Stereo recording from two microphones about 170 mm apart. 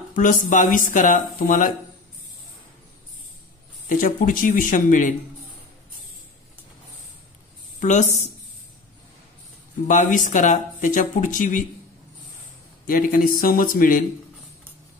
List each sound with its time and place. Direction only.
0.1 s speech: 50° left (ahead or behind)
3.9 s speech: 55° left (ahead or behind)
7.8 s speech: 45° left (ahead or behind)
9.8 s speech: 50° left (ahead or behind)
12.8 s speech: 55° left (ahead or behind)